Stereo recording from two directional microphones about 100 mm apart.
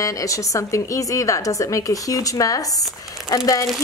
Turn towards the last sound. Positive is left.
turn(degrees=35)  # may be behind; listen again after turning